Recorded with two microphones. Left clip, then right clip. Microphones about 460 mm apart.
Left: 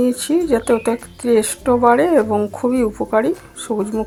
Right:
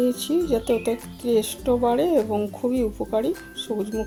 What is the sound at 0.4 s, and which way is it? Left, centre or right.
Speech, right.